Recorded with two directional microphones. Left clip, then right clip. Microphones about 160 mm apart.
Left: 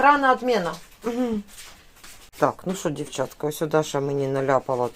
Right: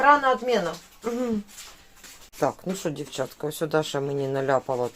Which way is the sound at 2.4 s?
10° left (ahead or behind).